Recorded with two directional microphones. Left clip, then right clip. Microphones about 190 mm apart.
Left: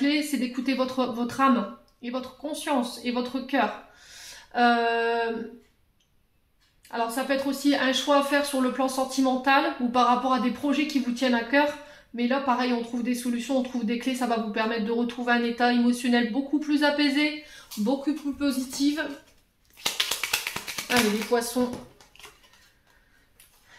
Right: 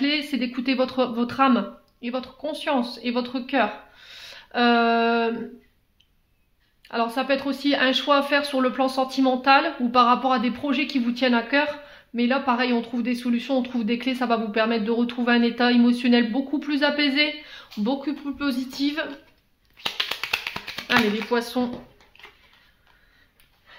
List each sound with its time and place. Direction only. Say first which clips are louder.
0.0 s speech: right 2 dB; 45° right (ahead or behind)
6.9 s speech: right 4 dB; 45° right (ahead or behind)
17.8 s speech: even; 30° right (ahead or behind)
19.8 s music: even; 25° right (ahead or behind)
22.1 s dishes: right 2 dB; 20° right (ahead or behind)